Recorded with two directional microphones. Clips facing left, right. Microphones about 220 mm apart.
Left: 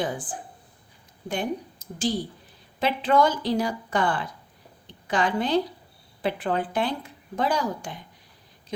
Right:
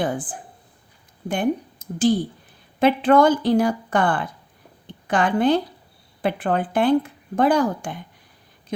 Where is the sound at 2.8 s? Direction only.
55° right (ahead or behind).